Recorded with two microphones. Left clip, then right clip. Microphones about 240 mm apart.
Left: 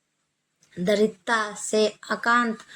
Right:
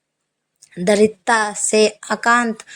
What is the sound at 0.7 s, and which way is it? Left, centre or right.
Speech, right.